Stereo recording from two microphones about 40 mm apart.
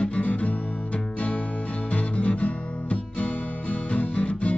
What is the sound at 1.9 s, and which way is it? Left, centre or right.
Guitar, left.